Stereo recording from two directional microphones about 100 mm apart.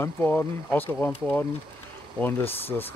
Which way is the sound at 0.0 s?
15° left (ahead or behind).